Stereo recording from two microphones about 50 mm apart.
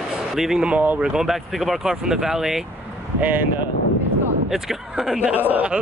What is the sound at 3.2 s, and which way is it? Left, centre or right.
Speech, right.